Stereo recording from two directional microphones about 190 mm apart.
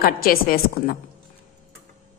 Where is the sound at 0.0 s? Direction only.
50° left (ahead or behind).